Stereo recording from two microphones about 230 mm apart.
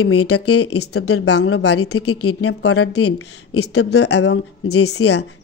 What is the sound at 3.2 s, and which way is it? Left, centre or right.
Speech, left.